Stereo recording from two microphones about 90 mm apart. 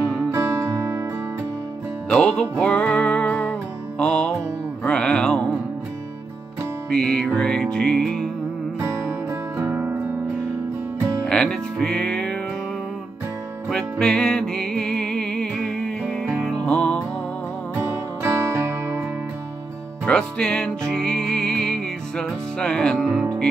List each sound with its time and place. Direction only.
0.3 s music: 25° right (ahead or behind)
2.1 s music: 10° left (ahead or behind)
6.9 s music: 10° left (ahead or behind)
8.8 s music: 30° right (ahead or behind)
11.2 s music: 10° left (ahead or behind)
13.7 s music: 10° left (ahead or behind)
17.7 s music: 30° right (ahead or behind)
20.1 s music: 10° left (ahead or behind)